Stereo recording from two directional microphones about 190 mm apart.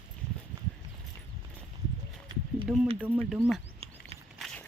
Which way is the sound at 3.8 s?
30° right (ahead or behind).